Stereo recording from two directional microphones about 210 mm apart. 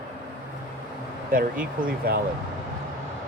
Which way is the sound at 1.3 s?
40° right (ahead or behind).